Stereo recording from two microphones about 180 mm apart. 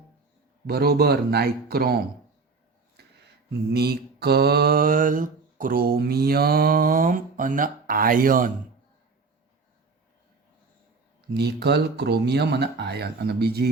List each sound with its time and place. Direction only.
0.7 s speech: 60° right (ahead or behind)
3.7 s mantra: 65° right (ahead or behind)
11.3 s speech: 65° right (ahead or behind)